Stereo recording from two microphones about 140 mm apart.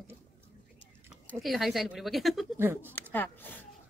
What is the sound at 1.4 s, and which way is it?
Speech, centre (ahead or behind).